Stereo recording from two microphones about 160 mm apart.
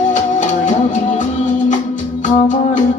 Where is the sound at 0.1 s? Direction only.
50° left (ahead or behind).